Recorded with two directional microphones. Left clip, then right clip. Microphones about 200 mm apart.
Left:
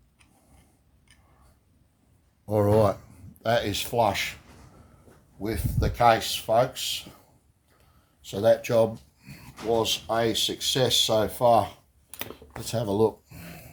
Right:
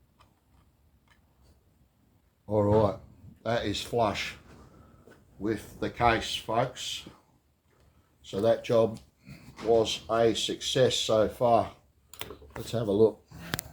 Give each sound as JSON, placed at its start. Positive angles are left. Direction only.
{"t": 2.5, "sound": "a sound", "side_deg": 45}
{"t": 3.4, "sound": "speech", "side_deg": 45}
{"t": 5.4, "sound": "speech", "side_deg": 40}
{"t": 8.2, "sound": "speech", "side_deg": 40}
{"t": 12.7, "sound": "speech", "side_deg": 35}